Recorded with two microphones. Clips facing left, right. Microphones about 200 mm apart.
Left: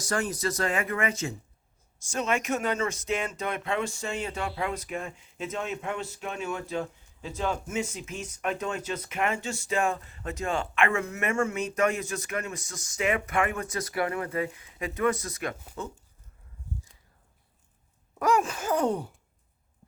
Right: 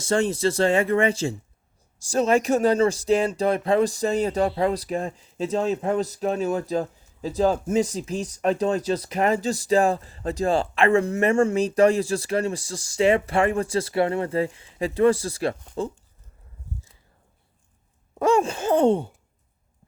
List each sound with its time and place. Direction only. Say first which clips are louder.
0.0 s speech: right 8 dB; 25° right (ahead or behind)
18.2 s sigh: right 5 dB; 30° right (ahead or behind)